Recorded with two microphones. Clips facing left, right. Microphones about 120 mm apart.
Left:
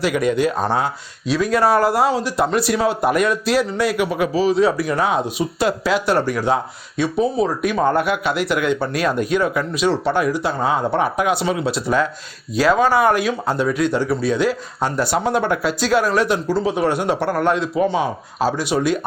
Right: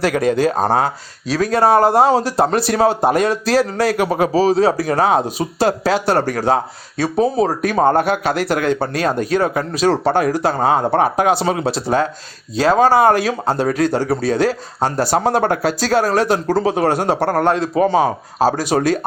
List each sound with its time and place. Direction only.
0.0 s speech: 35° right (ahead or behind)
2.0 s speech: 40° right (ahead or behind)